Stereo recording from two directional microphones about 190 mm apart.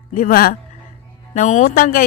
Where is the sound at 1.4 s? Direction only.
40° left (ahead or behind).